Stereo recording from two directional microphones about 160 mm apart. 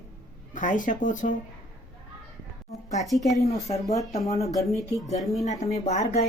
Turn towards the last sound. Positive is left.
turn(degrees=40)  # may be behind; listen again after turning